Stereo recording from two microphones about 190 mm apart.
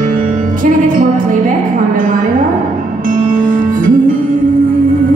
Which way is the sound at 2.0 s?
45° right (ahead or behind).